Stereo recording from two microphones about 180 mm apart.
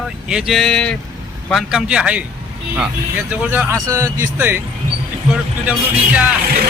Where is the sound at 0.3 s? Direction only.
5° right (ahead or behind).